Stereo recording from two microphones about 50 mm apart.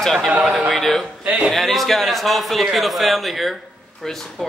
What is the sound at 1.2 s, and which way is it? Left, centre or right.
Speech, right.